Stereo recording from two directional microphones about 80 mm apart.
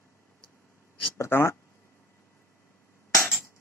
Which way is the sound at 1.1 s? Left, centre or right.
Left.